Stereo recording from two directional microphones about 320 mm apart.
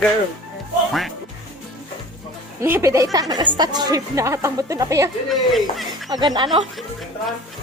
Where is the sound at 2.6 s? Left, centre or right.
Centre.